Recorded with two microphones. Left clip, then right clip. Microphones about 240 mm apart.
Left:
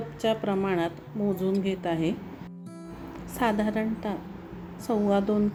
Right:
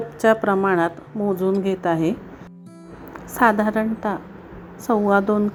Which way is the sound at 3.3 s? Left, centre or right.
Centre.